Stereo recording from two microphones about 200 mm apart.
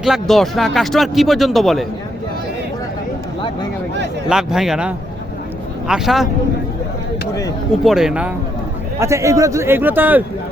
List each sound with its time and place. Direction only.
0.0 s speech: centre (ahead or behind)
4.3 s speech: 5° right (ahead or behind)
7.9 s a man's voice: 5° right (ahead or behind)